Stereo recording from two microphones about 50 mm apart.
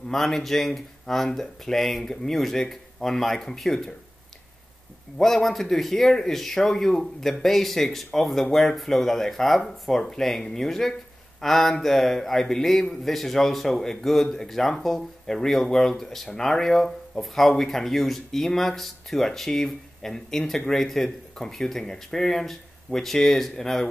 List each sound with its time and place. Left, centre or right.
0.1 s speech: centre
5.1 s speech: centre